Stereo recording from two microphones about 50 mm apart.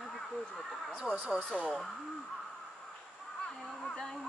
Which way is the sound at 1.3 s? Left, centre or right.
Centre.